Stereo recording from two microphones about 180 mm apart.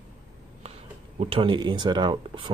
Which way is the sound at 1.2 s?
30° right (ahead or behind).